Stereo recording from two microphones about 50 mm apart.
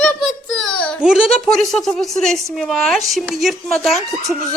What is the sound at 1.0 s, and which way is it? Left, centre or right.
Speech, centre.